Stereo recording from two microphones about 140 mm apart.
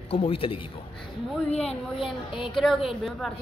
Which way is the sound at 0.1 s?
45° left (ahead or behind).